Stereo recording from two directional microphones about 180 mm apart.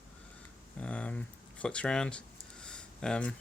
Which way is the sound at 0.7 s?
5° left (ahead or behind).